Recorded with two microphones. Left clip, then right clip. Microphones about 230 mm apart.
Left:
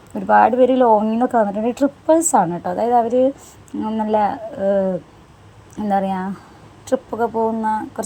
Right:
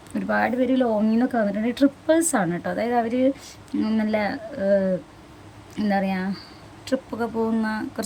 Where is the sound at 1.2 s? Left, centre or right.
Centre.